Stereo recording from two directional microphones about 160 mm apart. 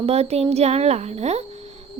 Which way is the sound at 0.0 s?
40° right (ahead or behind).